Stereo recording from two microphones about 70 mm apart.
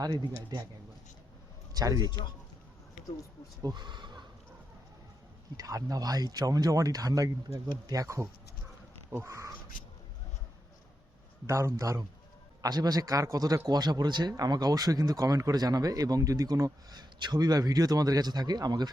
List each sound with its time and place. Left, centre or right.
0.0 s a man's voice: right
1.7 s a man's voice: right
3.6 s speech: right
5.5 s a man's voice: right
11.4 s a man's voice: right
12.6 s speech: right
13.7 s speech: right
15.5 s a man's voice: right